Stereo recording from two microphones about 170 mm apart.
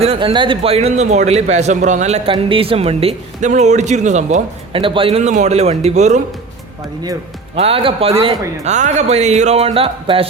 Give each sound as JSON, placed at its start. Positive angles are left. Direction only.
{"t": 0.0, "sound": "a man's voice", "side_deg": -35}
{"t": 4.7, "sound": "a man's voice", "side_deg": -30}
{"t": 7.5, "sound": "a man's voice", "side_deg": -35}